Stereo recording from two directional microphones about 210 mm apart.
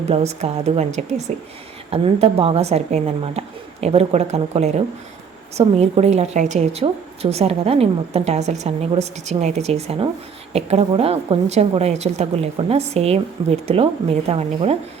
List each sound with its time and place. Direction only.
0.1 s a woman's voice: 30° right (ahead or behind)